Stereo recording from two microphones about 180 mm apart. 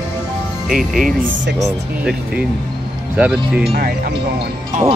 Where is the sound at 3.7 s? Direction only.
60° right (ahead or behind).